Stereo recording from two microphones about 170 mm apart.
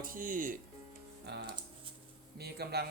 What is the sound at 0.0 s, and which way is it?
Speech, 55° right (ahead or behind).